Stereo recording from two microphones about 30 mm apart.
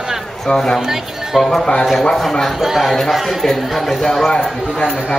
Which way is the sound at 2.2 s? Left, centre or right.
Centre.